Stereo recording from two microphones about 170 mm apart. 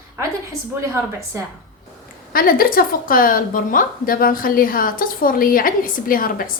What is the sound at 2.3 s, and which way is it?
A woman's voice, 60° left (ahead or behind).